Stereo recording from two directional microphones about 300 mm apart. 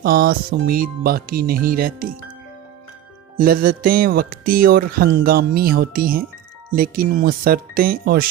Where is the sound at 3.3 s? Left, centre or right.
Right.